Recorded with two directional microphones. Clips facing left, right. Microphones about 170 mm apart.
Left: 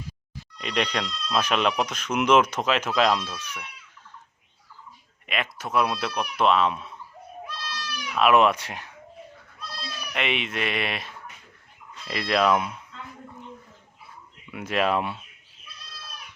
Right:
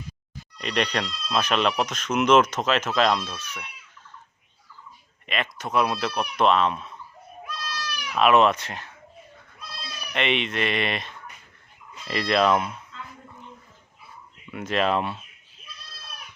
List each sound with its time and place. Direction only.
0.6 s speech: 5° left (ahead or behind)
5.2 s speech: 5° left (ahead or behind)
7.4 s goat: 25° left (ahead or behind)
8.2 s speech: 10° left (ahead or behind)
10.1 s speech: 5° left (ahead or behind)
14.5 s speech: 10° left (ahead or behind)